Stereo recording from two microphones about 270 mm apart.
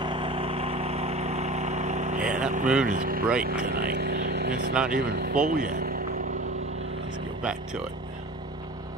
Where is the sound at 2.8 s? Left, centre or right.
Right.